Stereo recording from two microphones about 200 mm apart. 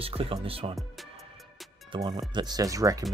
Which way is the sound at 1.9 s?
20° right (ahead or behind).